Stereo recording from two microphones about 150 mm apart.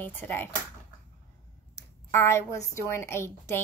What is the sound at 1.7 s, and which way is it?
A woman's voice, 20° left (ahead or behind).